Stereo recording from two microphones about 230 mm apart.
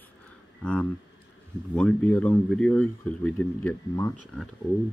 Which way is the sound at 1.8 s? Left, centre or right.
Centre.